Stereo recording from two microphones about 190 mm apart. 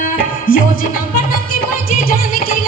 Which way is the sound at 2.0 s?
50° left (ahead or behind).